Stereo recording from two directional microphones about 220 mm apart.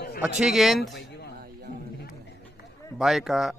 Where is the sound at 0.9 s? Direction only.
50° left (ahead or behind).